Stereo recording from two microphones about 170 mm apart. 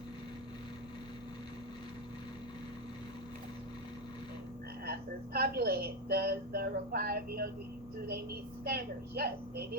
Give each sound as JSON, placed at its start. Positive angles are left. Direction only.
{"t": 4.9, "sound": "a woman's voice", "side_deg": -65}